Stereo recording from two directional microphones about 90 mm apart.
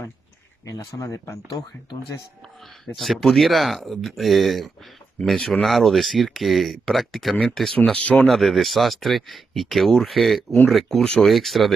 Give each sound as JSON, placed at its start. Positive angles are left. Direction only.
{"t": 0.7, "sound": "speech", "side_deg": 40}
{"t": 3.0, "sound": "speech", "side_deg": 0}
{"t": 8.3, "sound": "speech", "side_deg": 0}